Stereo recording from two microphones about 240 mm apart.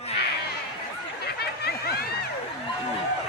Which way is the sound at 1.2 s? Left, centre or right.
Left.